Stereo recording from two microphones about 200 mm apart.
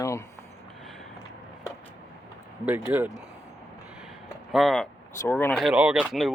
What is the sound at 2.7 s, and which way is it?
Speech, 10° right (ahead or behind).